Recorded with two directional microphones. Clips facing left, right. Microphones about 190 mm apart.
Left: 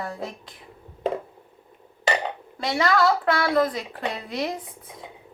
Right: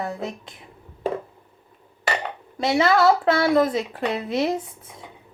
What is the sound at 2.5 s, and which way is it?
Speech, 25° right (ahead or behind).